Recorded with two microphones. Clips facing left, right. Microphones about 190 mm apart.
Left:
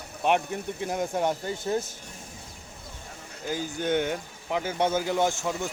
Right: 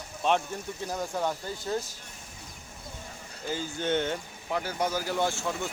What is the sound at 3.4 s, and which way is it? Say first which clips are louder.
Speech: left 2 dB; 10° left (ahead or behind).